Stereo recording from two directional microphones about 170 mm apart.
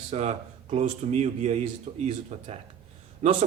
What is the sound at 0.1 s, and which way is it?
Speech, 40° right (ahead or behind).